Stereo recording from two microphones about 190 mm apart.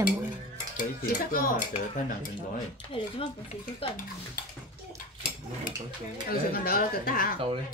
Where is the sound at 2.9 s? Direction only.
30° left (ahead or behind).